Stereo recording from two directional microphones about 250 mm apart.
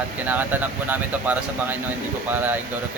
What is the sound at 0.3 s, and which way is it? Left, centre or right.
Speech, centre.